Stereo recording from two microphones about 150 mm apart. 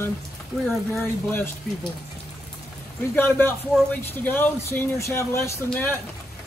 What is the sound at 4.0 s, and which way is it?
A man's voice, 15° left (ahead or behind).